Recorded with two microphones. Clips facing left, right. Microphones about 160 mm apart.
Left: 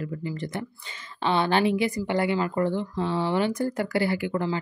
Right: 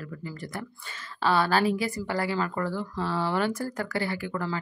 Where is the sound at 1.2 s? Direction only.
20° left (ahead or behind).